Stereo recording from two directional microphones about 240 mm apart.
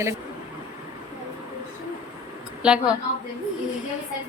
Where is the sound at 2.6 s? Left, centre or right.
Centre.